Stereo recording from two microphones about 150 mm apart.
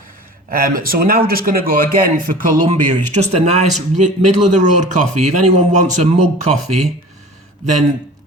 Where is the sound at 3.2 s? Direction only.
45° right (ahead or behind).